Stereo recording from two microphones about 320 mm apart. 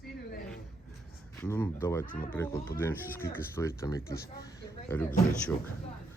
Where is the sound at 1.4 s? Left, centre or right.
Centre.